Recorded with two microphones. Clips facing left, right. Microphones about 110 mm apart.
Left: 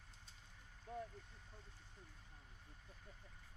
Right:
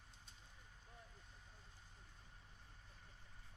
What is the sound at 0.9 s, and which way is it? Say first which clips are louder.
Vehicle: left 17 dB; 75° left (ahead or behind).